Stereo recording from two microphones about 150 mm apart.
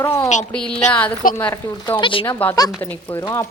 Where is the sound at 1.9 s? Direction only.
35° left (ahead or behind).